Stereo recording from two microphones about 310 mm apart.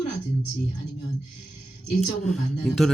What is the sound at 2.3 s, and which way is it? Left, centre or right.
Speech, centre.